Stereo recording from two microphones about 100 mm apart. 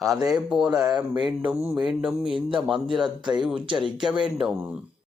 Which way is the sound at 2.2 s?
60° right (ahead or behind).